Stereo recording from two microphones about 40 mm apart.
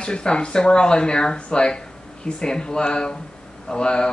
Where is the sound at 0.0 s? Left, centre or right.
Left.